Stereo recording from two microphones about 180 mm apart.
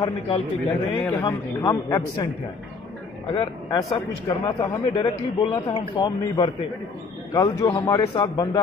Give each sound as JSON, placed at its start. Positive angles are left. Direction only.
{"t": 0.0, "sound": "a man's voice", "side_deg": 25}
{"t": 3.3, "sound": "a man's voice", "side_deg": 30}